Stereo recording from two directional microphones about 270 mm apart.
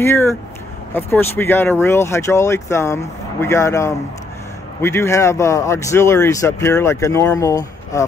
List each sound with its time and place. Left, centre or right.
0.0 s speech: centre